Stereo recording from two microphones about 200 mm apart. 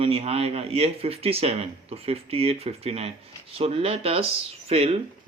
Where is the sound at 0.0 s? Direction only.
30° right (ahead or behind).